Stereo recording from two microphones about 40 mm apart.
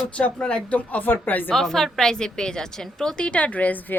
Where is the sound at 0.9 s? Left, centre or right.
Left.